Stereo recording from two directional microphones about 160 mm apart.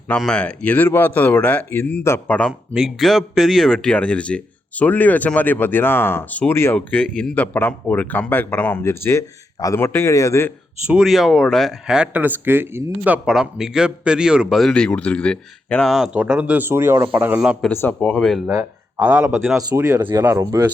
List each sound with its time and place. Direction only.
0.2 s speech: 5° left (ahead or behind)
2.5 s speech: 5° right (ahead or behind); by 10.5 s 20° left (ahead or behind)
10.8 s speech: 5° right (ahead or behind)
17.7 s speech: 10° left (ahead or behind)
18.4 s speech: 10° right (ahead or behind)
19.7 s speech: 20° right (ahead or behind)